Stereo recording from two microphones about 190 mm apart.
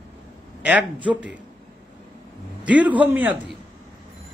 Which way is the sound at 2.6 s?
10° right (ahead or behind).